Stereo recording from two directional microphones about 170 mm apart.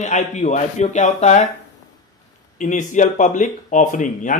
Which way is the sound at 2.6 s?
45° left (ahead or behind).